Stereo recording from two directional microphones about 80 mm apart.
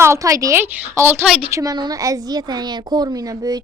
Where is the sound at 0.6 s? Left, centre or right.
Right.